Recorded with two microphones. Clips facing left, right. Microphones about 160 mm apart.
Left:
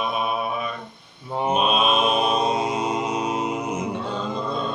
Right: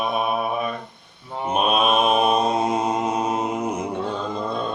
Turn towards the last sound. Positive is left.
turn(degrees=-50)  # may be behind; listen again after turning